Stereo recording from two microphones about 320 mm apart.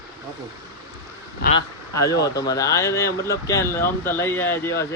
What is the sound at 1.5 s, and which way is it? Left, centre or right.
Speech, centre.